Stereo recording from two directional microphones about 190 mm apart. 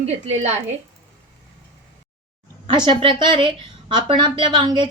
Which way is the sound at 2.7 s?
25° right (ahead or behind).